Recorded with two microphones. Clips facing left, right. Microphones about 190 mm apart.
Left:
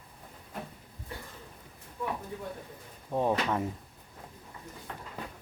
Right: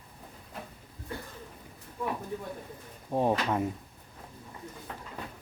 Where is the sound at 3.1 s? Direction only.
15° right (ahead or behind).